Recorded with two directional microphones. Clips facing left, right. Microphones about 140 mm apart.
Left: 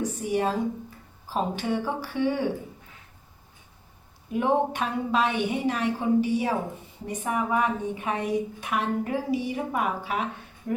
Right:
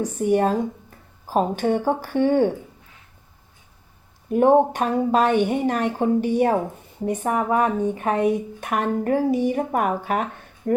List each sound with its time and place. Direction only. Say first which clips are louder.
0.2 s speech: right 8 dB; 50° right (ahead or behind)
4.3 s a woman's voice: right 8 dB; 45° right (ahead or behind)